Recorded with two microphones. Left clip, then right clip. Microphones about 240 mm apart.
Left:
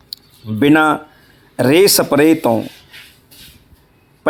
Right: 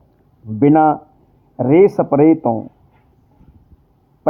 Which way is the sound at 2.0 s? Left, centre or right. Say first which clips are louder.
Even; left.